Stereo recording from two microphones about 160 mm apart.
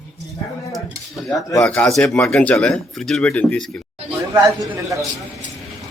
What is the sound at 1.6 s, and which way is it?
Speech, 5° left (ahead or behind).